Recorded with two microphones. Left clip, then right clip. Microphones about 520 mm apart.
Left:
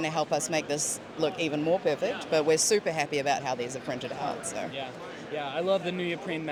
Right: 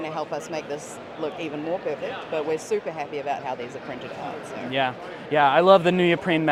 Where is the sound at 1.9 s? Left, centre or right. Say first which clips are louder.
Left 1 dB; left.